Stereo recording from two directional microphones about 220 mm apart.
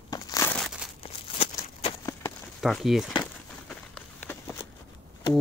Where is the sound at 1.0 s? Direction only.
25° left (ahead or behind).